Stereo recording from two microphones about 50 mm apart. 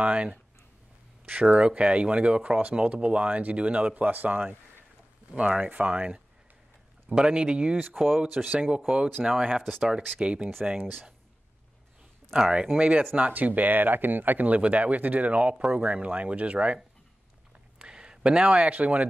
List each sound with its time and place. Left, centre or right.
0.0 s speech: right
7.9 s speech: centre
8.3 s speech: right
8.5 s speech: centre
9.6 s speech: centre
10.0 s speech: right
10.6 s speech: right
12.4 s speech: right